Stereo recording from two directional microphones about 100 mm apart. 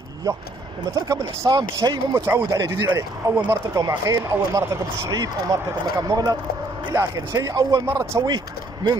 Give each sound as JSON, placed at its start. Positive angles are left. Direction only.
{"t": 0.9, "sound": "speech", "side_deg": -35}
{"t": 3.4, "sound": "speech", "side_deg": -35}
{"t": 7.8, "sound": "speech", "side_deg": -25}